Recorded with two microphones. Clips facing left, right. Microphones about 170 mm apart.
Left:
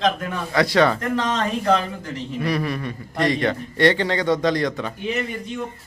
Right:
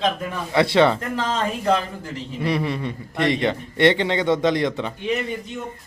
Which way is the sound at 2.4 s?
25° right (ahead or behind).